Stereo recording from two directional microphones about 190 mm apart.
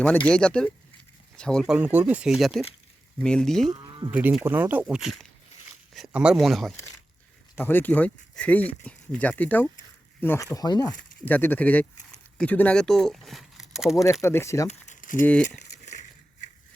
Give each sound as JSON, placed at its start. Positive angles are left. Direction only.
{"t": 0.3, "sound": "speech", "side_deg": 5}
{"t": 3.7, "sound": "cattle", "side_deg": -25}
{"t": 4.1, "sound": "speech", "side_deg": -5}
{"t": 11.2, "sound": "speech", "side_deg": 10}
{"t": 13.9, "sound": "speech", "side_deg": 15}
{"t": 14.7, "sound": "crumpling", "side_deg": 40}
{"t": 15.4, "sound": "a sound", "side_deg": 40}